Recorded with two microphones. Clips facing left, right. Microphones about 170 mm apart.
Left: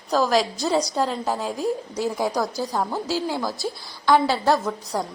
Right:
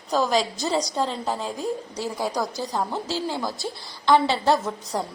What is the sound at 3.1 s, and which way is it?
A woman's voice, 15° left (ahead or behind).